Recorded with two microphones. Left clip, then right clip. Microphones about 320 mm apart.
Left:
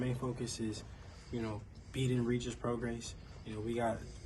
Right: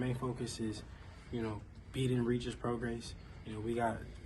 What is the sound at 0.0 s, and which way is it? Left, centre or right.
Speech, centre.